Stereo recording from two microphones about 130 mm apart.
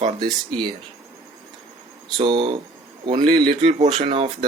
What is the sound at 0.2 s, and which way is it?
Speech, 35° right (ahead or behind).